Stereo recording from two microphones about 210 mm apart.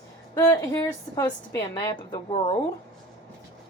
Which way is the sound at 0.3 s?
15° left (ahead or behind).